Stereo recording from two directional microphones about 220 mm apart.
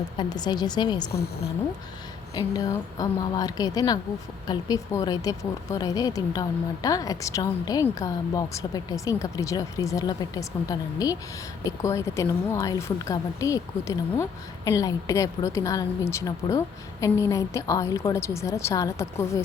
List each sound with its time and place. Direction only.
0.2 s a woman's voice: 20° left (ahead or behind)
2.3 s speech: 15° left (ahead or behind)